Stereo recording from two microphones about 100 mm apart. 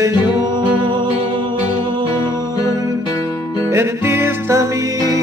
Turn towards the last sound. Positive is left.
turn(degrees=-30)  # may be behind; listen again after turning